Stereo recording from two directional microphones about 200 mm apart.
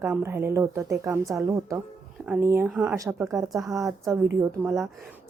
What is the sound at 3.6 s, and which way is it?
Speech, 15° right (ahead or behind).